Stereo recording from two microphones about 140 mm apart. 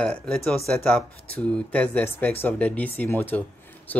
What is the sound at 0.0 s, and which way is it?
Speech, 5° left (ahead or behind).